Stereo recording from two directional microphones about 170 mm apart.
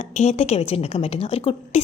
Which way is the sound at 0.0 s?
40° left (ahead or behind).